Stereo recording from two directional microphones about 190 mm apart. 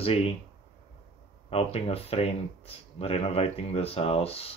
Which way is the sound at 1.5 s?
30° left (ahead or behind).